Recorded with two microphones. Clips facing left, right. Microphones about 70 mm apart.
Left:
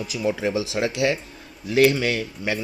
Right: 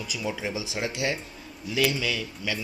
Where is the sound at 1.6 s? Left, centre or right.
Left.